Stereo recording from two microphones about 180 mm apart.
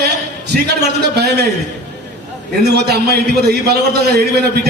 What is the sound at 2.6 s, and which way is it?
A man's voice, 65° right (ahead or behind).